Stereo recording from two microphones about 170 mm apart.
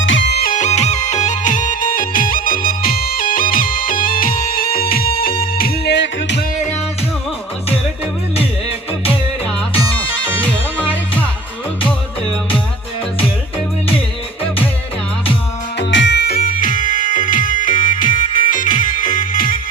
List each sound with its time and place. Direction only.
0.0 s music: 90° left
10.4 s music: 10° left (ahead or behind)
15.9 s music: 90° left; by 19.5 s 55° left (ahead or behind)